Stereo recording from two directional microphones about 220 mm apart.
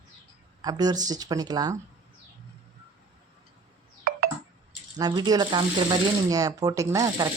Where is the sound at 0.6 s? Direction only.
15° right (ahead or behind).